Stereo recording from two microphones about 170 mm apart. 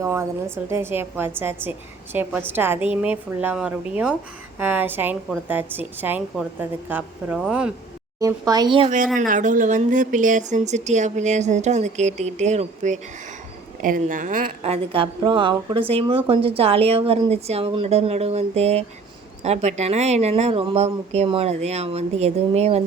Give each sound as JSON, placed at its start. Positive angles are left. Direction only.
{"t": 0.0, "sound": "a woman's voice", "side_deg": -15}
{"t": 8.2, "sound": "speech", "side_deg": -20}
{"t": 9.1, "sound": "a woman's voice", "side_deg": -50}